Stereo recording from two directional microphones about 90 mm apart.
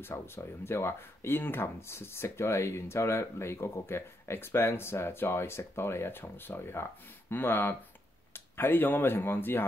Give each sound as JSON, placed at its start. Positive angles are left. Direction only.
{"t": 0.0, "sound": "speech", "side_deg": 25}